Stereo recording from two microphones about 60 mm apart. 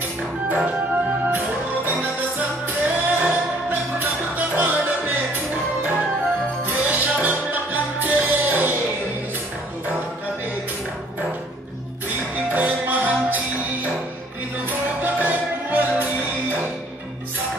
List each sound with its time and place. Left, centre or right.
0.5 s music: right
3.1 s music: right
6.6 s music: right
12.4 s music: right
14.7 s music: right